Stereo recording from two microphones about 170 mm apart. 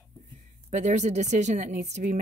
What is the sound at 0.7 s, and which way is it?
Speech, 45° right (ahead or behind).